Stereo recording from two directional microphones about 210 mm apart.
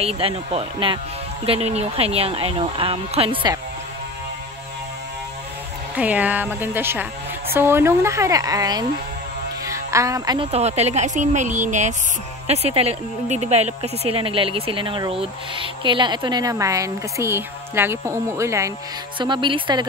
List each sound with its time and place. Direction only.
0.0 s speech: 25° right (ahead or behind)
5.9 s speech: 5° right (ahead or behind)